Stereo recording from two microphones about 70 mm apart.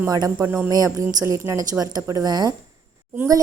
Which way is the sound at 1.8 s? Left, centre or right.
Right.